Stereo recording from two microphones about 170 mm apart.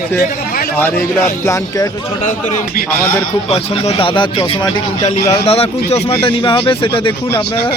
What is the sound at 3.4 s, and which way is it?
Speech, 35° left (ahead or behind).